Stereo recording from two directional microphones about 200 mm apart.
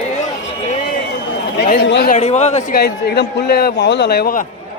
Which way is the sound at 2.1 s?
35° left (ahead or behind).